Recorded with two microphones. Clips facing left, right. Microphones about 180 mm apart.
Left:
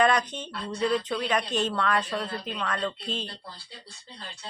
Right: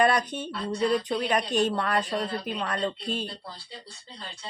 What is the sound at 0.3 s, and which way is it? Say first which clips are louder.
A woman's voice: right 4 dB; 10° right (ahead or behind).